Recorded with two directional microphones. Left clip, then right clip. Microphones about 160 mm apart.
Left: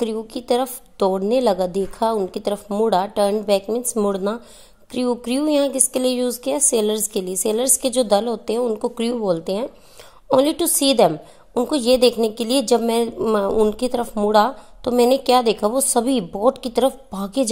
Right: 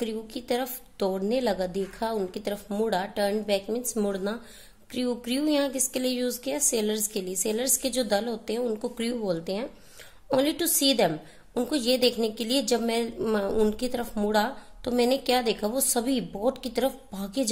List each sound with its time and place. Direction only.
0.0 s a woman's voice: 30° left (ahead or behind)